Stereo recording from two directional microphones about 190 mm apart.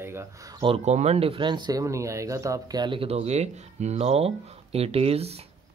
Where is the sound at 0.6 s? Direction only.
35° right (ahead or behind).